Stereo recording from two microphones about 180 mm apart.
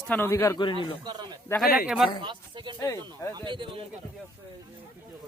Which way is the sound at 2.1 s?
25° right (ahead or behind).